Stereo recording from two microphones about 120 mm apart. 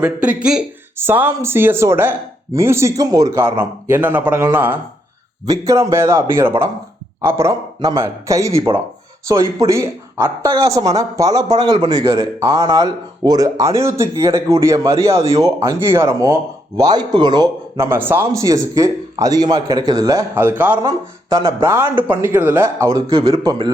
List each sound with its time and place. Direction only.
0.0 s speech: 10° right (ahead or behind); by 11.6 s 30° right (ahead or behind)
11.6 s speech: 40° right (ahead or behind)
17.7 s speech: 20° right (ahead or behind)
20.4 s speech: 15° right (ahead or behind)
20.8 s speech: 30° right (ahead or behind)
21.6 s speech: 20° right (ahead or behind)